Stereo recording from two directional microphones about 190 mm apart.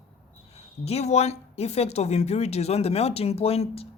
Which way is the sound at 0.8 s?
35° left (ahead or behind).